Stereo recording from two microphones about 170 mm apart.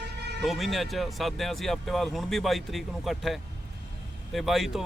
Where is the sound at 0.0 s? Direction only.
80° right.